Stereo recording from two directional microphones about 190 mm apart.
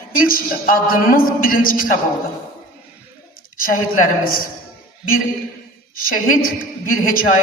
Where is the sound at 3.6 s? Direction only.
50° left (ahead or behind).